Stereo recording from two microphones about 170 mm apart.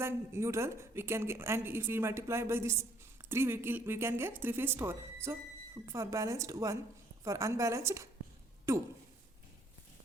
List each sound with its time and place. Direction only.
0.0 s speech: 15° right (ahead or behind)